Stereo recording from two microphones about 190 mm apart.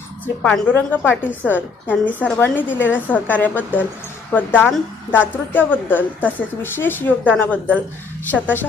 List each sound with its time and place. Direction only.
0.4 s a woman's voice: 10° left (ahead or behind)